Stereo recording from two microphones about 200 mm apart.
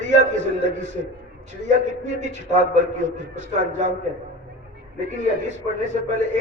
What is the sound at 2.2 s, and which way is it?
A man's voice, 35° right (ahead or behind).